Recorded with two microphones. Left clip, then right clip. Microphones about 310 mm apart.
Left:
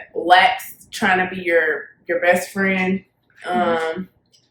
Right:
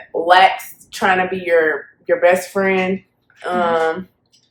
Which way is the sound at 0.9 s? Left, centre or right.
Centre.